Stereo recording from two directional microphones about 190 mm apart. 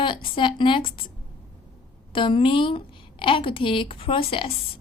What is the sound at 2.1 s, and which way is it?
A woman's voice, 25° left (ahead or behind).